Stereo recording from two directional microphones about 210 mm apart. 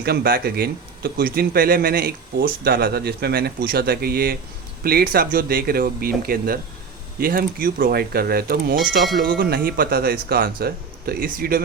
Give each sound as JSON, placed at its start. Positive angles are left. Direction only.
{"t": 0.0, "sound": "speech", "side_deg": -50}